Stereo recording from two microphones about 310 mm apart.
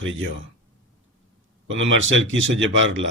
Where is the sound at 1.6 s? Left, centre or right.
Right.